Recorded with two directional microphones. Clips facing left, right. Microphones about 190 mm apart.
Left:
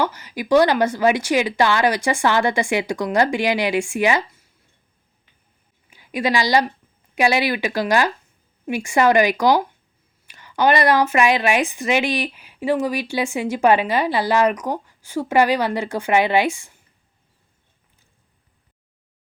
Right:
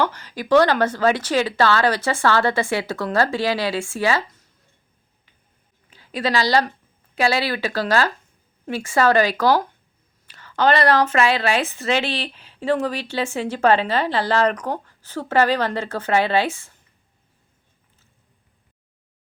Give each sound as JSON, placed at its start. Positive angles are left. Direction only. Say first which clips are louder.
{"t": 0.0, "sound": "a woman's voice", "louder": "even", "side_deg": 10}
{"t": 5.9, "sound": "a woman's voice", "louder": "left 1 dB", "side_deg": 15}